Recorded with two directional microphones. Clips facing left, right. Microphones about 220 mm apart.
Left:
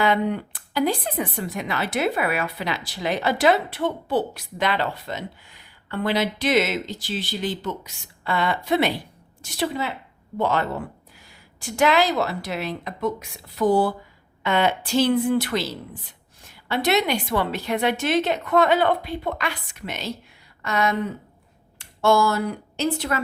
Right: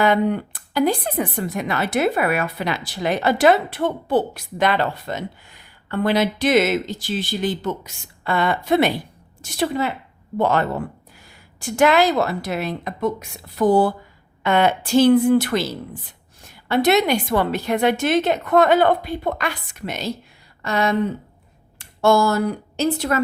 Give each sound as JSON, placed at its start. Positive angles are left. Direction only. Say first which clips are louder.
{"t": 0.0, "sound": "speech", "louder": "right 4 dB", "side_deg": -50}
{"t": 20.6, "sound": "speech", "louder": "right 2 dB", "side_deg": -30}
{"t": 21.8, "sound": "speech", "louder": "right 2 dB", "side_deg": -45}